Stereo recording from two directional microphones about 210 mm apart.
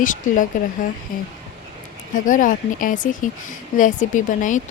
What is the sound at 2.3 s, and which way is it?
Speech, 40° left (ahead or behind).